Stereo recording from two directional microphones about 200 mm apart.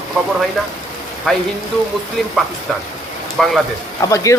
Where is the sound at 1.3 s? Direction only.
5° left (ahead or behind).